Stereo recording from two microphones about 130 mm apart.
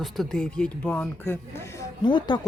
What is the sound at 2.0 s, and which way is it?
Speech, 35° left (ahead or behind).